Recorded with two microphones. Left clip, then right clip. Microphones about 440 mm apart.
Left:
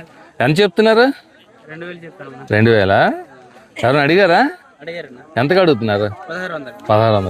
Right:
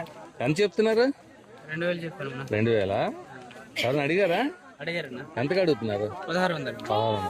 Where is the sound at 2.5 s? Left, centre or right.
Left.